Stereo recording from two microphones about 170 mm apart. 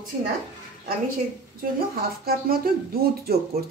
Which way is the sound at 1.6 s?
60° right (ahead or behind).